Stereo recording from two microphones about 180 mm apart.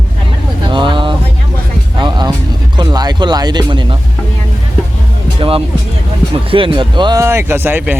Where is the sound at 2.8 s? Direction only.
20° right (ahead or behind).